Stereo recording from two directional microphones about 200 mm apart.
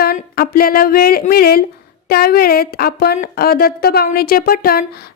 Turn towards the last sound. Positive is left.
turn(degrees=50)  # may be behind; listen again after turning